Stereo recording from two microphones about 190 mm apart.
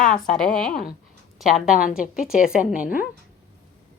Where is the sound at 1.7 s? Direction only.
45° left (ahead or behind).